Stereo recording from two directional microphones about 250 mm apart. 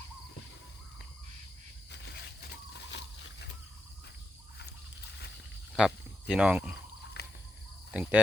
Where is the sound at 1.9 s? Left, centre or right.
Left.